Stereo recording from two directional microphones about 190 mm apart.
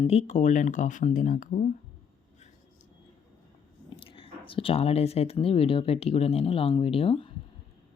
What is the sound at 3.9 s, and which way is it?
Speech, 25° left (ahead or behind).